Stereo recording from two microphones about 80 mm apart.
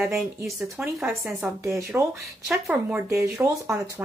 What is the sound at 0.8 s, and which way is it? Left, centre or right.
Speech, right.